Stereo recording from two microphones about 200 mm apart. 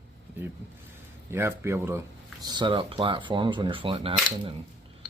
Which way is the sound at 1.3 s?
10° right (ahead or behind).